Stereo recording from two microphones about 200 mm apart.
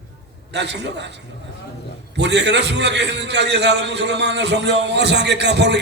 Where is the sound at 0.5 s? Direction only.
60° right (ahead or behind).